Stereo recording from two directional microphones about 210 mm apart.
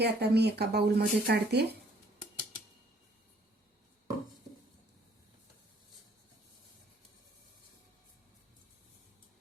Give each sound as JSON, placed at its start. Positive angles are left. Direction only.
{"t": 0.0, "sound": "speech", "side_deg": -50}